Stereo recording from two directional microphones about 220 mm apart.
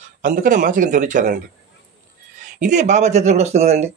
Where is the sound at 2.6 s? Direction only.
35° right (ahead or behind).